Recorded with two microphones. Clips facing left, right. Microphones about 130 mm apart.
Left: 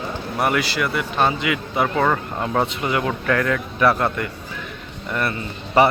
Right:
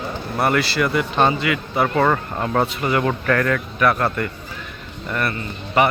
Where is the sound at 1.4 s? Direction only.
15° left (ahead or behind).